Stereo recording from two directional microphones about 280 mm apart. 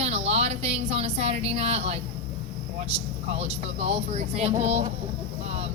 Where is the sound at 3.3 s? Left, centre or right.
Right.